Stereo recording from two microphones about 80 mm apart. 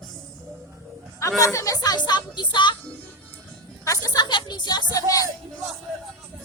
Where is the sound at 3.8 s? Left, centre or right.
Left.